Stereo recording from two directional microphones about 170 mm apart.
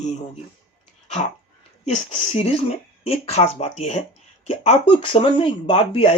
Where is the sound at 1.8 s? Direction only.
40° left (ahead or behind).